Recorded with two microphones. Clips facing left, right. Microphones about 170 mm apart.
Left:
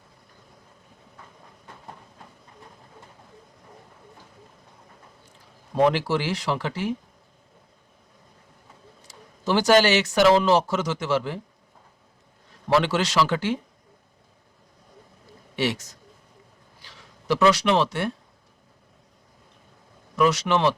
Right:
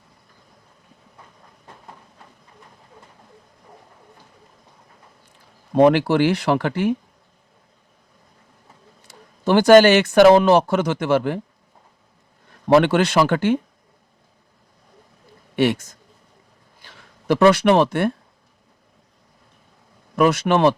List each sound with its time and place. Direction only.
5.7 s speech: 60° right (ahead or behind)
9.0 s speech: 60° right (ahead or behind)
12.6 s speech: 55° right (ahead or behind)
15.5 s a man's voice: 55° right (ahead or behind)
20.1 s speech: 55° right (ahead or behind)